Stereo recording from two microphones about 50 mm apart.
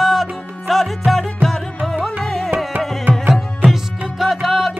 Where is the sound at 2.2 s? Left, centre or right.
Centre.